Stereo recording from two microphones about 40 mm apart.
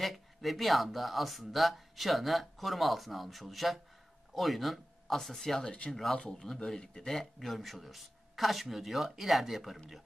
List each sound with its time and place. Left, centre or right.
0.0 s speech: centre
6.8 s speech: left
7.1 s speech: centre